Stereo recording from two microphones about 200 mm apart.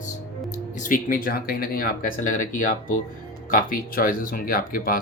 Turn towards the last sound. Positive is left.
turn(degrees=45)  # may be behind; listen again after turning